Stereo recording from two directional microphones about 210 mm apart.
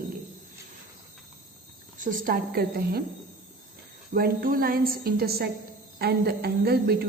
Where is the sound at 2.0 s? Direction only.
40° right (ahead or behind).